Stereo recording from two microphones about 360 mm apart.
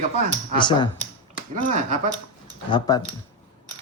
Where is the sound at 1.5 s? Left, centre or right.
Right.